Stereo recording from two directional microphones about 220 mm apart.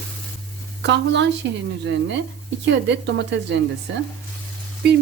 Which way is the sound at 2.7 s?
55° right (ahead or behind).